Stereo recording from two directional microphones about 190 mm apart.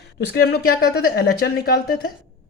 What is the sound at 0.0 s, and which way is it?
A woman's voice, 60° left (ahead or behind).